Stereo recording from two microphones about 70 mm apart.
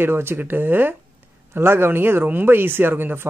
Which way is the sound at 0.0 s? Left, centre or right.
Right.